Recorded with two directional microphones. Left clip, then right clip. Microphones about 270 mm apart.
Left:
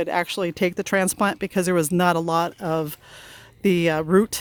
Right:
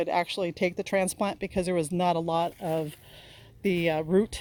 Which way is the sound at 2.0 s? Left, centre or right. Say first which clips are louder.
Left 4 dB; left.